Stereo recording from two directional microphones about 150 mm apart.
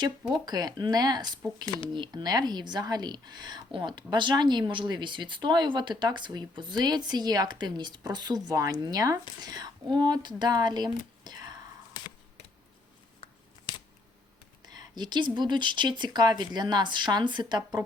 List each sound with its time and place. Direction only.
0.4 s speech: 25° right (ahead or behind)
1.6 s speech: 30° left (ahead or behind)
1.9 s speech: 30° right (ahead or behind)
13.7 s scissors: 30° left (ahead or behind)
14.6 s speech: 30° right (ahead or behind)